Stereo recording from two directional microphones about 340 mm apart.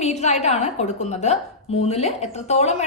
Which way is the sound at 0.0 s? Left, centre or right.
Centre.